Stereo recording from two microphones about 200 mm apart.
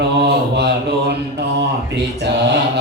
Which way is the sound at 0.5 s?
55° right (ahead or behind).